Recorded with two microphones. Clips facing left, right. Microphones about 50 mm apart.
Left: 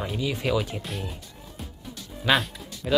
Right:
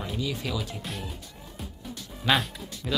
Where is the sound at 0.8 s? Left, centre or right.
Centre.